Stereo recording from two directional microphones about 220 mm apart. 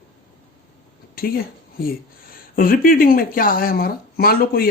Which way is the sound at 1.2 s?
40° left (ahead or behind).